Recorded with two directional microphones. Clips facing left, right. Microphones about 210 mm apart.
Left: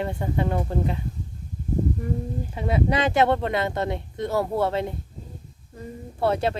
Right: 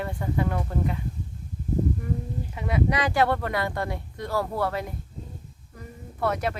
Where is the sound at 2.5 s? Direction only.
30° left (ahead or behind).